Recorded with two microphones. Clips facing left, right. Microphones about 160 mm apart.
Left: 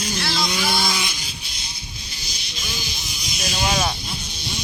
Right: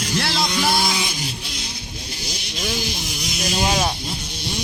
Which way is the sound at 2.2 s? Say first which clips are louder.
Right 9 dB; 75° right (ahead or behind).